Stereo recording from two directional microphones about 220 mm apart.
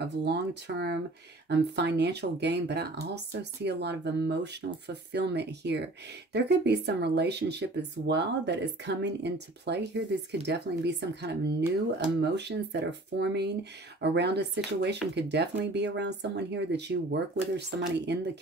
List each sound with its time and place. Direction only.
0.0 s speech: 50° right (ahead or behind)